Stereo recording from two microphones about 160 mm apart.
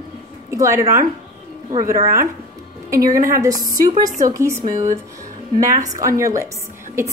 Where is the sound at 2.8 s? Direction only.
20° right (ahead or behind).